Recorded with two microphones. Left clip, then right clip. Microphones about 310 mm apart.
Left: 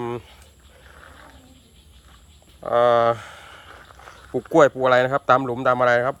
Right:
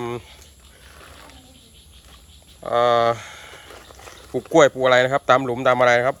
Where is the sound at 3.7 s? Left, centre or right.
Right.